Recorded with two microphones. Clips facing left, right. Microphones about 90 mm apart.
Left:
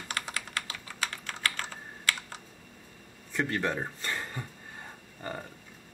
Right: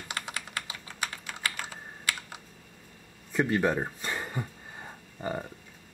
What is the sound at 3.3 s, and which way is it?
Speech, 15° right (ahead or behind).